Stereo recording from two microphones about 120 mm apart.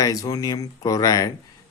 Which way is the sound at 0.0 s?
30° left (ahead or behind).